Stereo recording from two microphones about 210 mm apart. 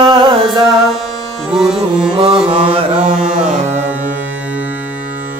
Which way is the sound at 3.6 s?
35° right (ahead or behind).